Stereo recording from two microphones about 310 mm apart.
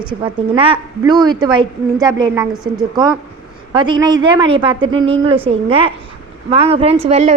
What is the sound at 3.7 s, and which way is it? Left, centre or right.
A woman's voice, centre.